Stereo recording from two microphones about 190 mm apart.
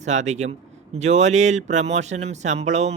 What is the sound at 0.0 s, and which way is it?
Speech, 40° right (ahead or behind).